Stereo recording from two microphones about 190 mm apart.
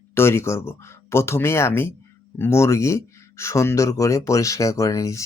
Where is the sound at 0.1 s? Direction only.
15° left (ahead or behind).